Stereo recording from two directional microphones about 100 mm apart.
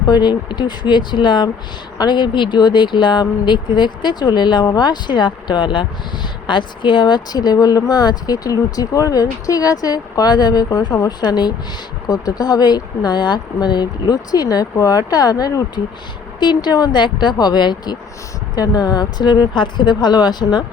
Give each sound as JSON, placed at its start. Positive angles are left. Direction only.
{"t": 0.0, "sound": "speech", "side_deg": 45}